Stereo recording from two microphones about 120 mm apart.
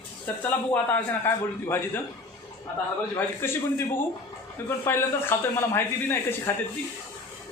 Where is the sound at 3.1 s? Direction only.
20° left (ahead or behind).